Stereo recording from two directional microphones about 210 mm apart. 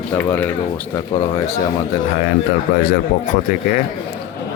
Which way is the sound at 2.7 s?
50° left (ahead or behind).